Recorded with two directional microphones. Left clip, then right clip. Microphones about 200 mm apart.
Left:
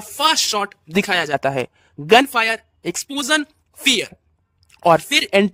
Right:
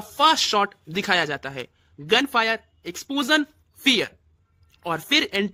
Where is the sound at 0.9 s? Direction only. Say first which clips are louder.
Left 6 dB; 50° left (ahead or behind).